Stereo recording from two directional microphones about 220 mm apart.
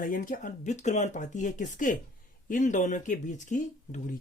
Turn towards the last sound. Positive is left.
turn(degrees=35)  # may be behind; listen again after turning